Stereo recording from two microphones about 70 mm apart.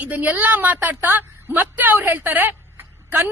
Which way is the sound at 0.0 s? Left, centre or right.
Right.